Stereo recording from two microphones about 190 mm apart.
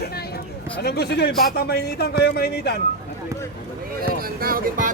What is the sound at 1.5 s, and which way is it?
Speech, 55° left (ahead or behind).